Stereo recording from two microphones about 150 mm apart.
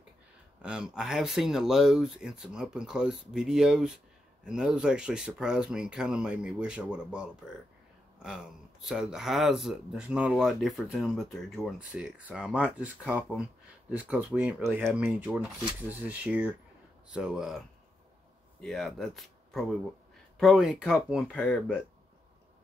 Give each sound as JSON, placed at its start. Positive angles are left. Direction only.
{"t": 0.6, "sound": "speech", "side_deg": -5}
{"t": 8.8, "sound": "speech", "side_deg": -5}
{"t": 18.6, "sound": "speech", "side_deg": 0}
{"t": 21.3, "sound": "speech", "side_deg": 5}